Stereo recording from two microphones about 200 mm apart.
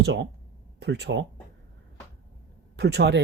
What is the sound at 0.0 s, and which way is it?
Speech, 60° right (ahead or behind).